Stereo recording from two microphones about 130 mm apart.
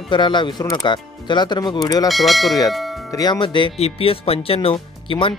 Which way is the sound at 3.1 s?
30° left (ahead or behind).